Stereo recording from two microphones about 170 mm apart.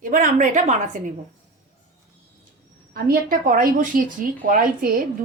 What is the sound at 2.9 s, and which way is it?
A woman's voice, 55° right (ahead or behind).